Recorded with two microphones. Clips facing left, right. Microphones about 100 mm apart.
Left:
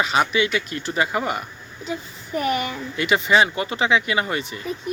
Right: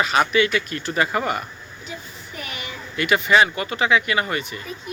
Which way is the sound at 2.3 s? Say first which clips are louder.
Left 12 dB; 45° left (ahead or behind).